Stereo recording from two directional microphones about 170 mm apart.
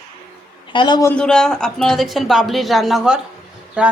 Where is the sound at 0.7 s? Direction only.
25° left (ahead or behind).